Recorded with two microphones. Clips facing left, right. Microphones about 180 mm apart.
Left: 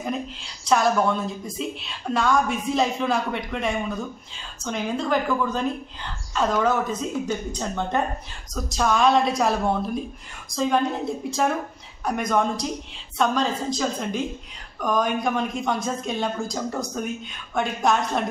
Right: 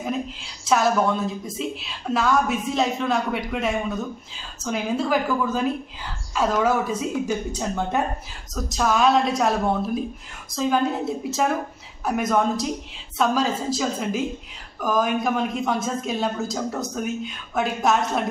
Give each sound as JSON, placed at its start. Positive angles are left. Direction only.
{"t": 0.0, "sound": "a woman's voice", "side_deg": 0}